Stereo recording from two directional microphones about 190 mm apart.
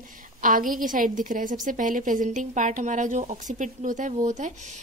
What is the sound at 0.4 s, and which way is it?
A woman's voice, 45° right (ahead or behind).